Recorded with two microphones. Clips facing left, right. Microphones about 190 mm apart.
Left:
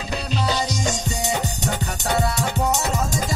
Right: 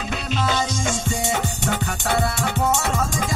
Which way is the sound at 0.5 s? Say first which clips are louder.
Even; 35° left (ahead or behind).